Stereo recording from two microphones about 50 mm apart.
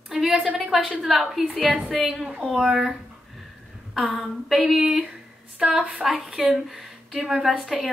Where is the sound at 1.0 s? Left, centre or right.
Centre.